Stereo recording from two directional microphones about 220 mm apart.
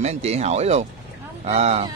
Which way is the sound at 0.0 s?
30° right (ahead or behind).